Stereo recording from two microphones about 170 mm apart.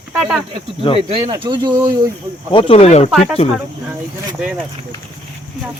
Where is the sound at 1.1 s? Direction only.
30° right (ahead or behind).